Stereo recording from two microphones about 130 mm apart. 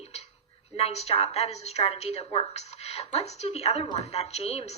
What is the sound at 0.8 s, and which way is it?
Speech, 55° left (ahead or behind).